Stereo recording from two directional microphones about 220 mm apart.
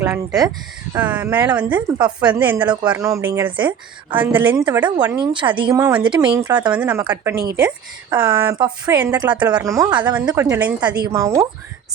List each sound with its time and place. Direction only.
0.0 s a woman's voice: 10° right (ahead or behind)
1.6 s speech: 20° right (ahead or behind)
2.0 s a woman's voice: 5° right (ahead or behind)
7.3 s a woman's voice: 45° right (ahead or behind)
8.1 s a woman's voice: 10° right (ahead or behind)
8.5 s a woman's voice: 20° right (ahead or behind)